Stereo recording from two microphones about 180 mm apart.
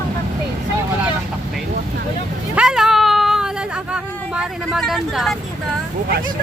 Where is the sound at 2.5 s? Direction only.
5° right (ahead or behind).